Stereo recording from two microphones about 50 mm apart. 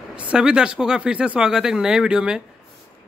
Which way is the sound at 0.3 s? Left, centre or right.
Centre.